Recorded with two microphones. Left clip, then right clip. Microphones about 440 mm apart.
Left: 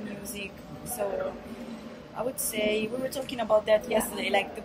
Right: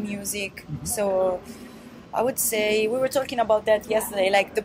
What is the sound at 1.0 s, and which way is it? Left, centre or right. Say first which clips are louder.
Speech: right 7 dB; right.